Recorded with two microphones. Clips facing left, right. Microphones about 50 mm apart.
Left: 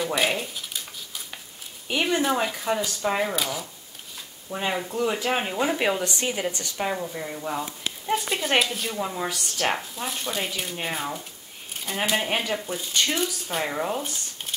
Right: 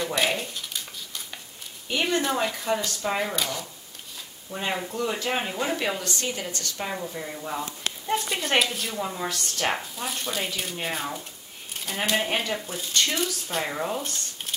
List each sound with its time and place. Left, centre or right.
0.0 s a sound: centre
1.9 s speech: centre
4.6 s speech: centre
5.8 s speech: centre
6.9 s speech: centre